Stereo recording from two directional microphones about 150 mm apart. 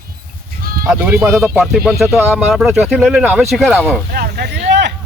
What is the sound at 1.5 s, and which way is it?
Speech, 5° right (ahead or behind).